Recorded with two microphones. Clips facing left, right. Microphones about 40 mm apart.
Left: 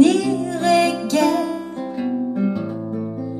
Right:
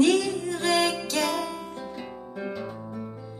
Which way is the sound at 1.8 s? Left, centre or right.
Left.